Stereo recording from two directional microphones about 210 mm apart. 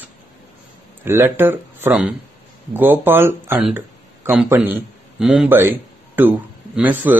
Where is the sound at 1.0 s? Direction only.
10° right (ahead or behind).